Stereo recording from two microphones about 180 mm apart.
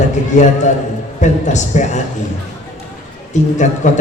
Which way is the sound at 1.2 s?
40° left (ahead or behind).